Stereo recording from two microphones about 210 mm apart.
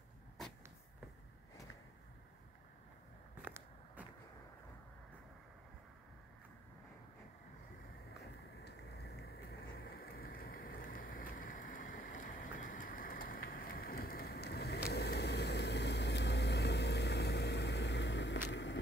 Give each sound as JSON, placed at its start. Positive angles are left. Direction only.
{"t": 3.4, "sound": "walk", "side_deg": -10}
{"t": 10.1, "sound": "a sound", "side_deg": 45}
{"t": 14.9, "sound": "vehicle", "side_deg": 50}